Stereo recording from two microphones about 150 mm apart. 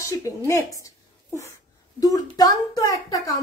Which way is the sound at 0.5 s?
20° left (ahead or behind).